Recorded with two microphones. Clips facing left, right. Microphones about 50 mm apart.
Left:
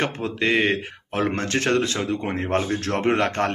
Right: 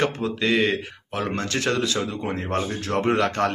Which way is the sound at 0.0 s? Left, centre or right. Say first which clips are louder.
Even; left.